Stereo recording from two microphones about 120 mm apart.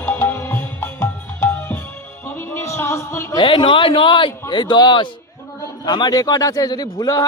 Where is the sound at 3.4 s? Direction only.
45° left (ahead or behind).